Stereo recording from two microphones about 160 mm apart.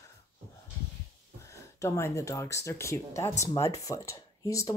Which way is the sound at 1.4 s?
20° left (ahead or behind).